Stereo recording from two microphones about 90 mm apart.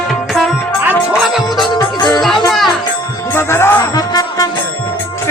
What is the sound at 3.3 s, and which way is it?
Music, 25° left (ahead or behind).